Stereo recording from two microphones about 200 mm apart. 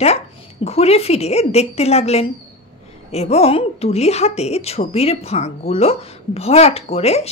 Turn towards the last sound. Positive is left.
turn(degrees=30)  # may be behind; listen again after turning